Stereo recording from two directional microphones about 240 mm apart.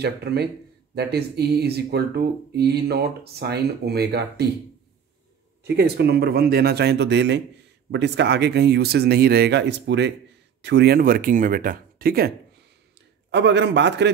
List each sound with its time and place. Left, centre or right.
0.0 s speech: right
5.6 s speech: right
13.3 s speech: right